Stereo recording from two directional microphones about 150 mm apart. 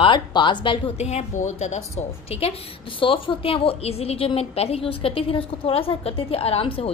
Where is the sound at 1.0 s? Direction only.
45° left (ahead or behind).